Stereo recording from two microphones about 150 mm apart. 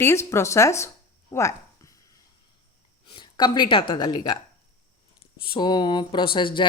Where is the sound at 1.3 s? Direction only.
20° left (ahead or behind).